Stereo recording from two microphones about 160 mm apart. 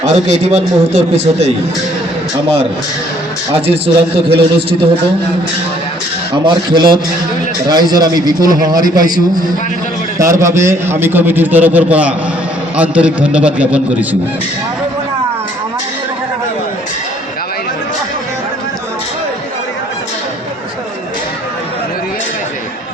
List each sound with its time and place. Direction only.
0.0 s a man's voice: 45° right (ahead or behind)
3.5 s a man's voice: 35° right (ahead or behind)
6.3 s a man's voice: 30° right (ahead or behind); by 14.2 s 10° right (ahead or behind)